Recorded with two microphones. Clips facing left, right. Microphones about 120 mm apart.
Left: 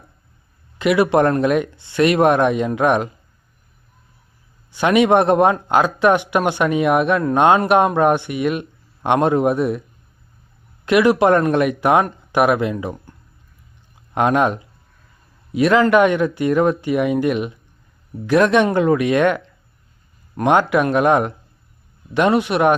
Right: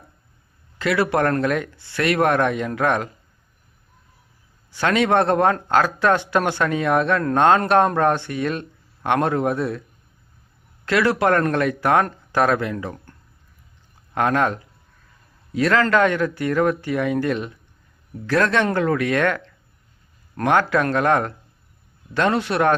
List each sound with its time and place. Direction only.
0.8 s speech: 15° left (ahead or behind)
4.7 s speech: 15° left (ahead or behind)
10.8 s speech: 15° left (ahead or behind)